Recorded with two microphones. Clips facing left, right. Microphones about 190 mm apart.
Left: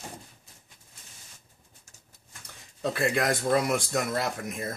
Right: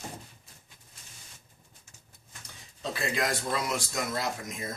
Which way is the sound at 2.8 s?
55° left (ahead or behind).